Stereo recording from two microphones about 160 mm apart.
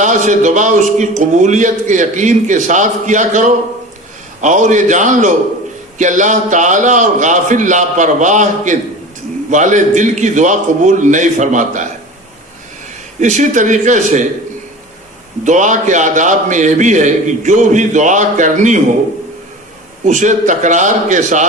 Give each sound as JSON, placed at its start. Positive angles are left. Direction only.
{"t": 0.0, "sound": "a man's voice", "side_deg": -50}
{"t": 13.1, "sound": "a man's voice", "side_deg": -50}
{"t": 15.4, "sound": "a man's voice", "side_deg": -50}
{"t": 20.1, "sound": "a man's voice", "side_deg": -50}